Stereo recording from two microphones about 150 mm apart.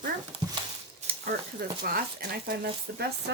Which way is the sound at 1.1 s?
80° right.